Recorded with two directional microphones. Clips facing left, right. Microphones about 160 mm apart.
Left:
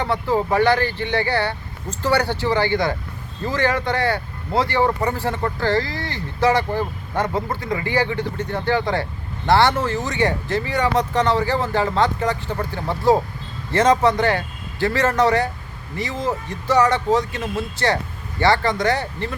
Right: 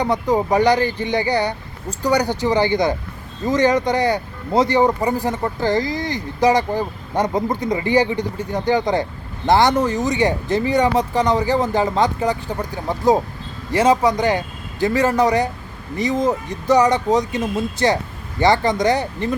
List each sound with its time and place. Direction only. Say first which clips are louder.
0.0 s speech: right 2 dB; 15° right (ahead or behind)